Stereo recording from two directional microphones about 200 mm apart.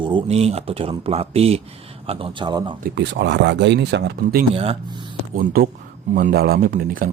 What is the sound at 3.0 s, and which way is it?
Speech, 60° right (ahead or behind).